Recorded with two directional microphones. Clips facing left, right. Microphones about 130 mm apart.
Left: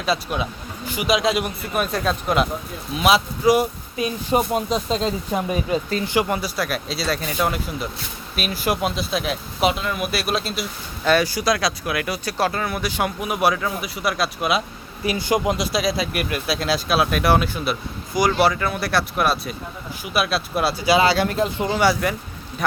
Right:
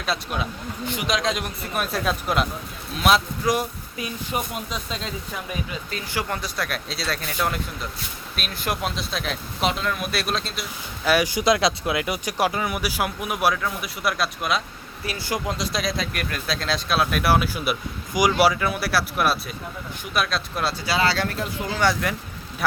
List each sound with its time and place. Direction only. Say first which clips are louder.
0.0 s speech: left 4 dB; centre (ahead or behind)
4.3 s speech: left 10 dB; 35° left (ahead or behind)
6.1 s speech: left 4 dB; 15° left (ahead or behind)
11.1 s speech: left 1 dB; 15° right (ahead or behind); by 14.6 s 5° left (ahead or behind)
15.0 s speech: left 7 dB; 20° left (ahead or behind)
21.8 s speech: left 3 dB; 5° left (ahead or behind)